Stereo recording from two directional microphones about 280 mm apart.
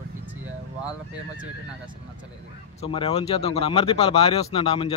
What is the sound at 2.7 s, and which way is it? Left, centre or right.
Speech, centre.